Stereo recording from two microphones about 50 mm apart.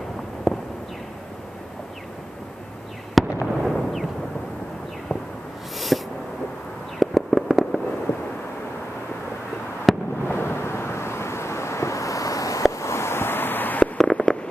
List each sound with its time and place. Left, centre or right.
0.5 s a sound: centre
3.2 s fireworks: centre
3.6 s a sound: centre
5.9 s owl: centre
7.0 s fireworks: centre
9.9 s fireworks: centre
10.2 s vehicle: left
12.7 s a sound: left
13.9 s fireworks: centre